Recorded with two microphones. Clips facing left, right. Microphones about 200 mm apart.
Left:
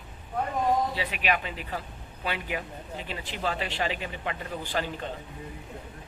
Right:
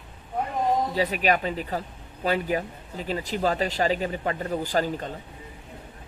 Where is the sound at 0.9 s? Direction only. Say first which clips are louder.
Right 6 dB; 40° right (ahead or behind).